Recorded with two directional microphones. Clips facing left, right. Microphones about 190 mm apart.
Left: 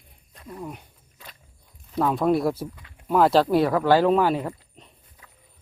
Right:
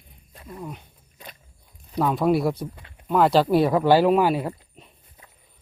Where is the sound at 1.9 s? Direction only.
Centre (ahead or behind).